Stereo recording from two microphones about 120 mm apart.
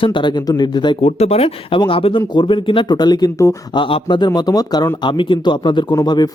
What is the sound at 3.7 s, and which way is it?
A man's voice, 45° left (ahead or behind).